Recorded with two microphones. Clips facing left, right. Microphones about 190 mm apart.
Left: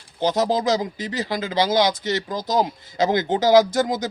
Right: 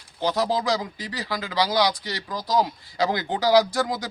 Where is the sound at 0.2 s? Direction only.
20° left (ahead or behind).